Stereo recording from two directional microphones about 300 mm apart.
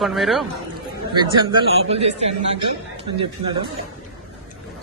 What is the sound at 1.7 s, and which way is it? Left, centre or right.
Speech, centre.